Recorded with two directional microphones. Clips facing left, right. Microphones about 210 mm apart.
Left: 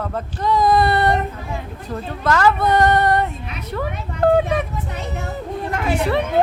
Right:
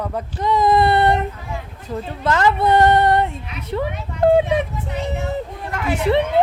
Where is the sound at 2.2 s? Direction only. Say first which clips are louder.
Even; 25° right (ahead or behind).